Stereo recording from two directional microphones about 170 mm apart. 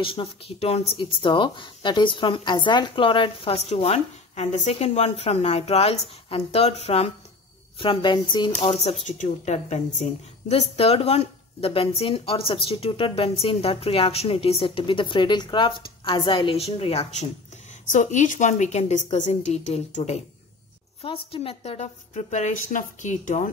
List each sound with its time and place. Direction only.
0.0 s a woman's voice: 30° left (ahead or behind)
17.9 s a woman's voice: 50° left (ahead or behind)